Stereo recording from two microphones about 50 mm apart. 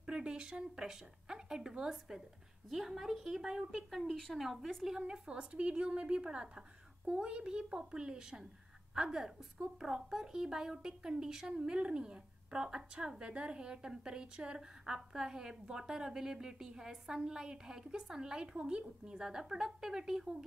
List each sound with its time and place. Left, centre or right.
0.0 s a woman's voice: centre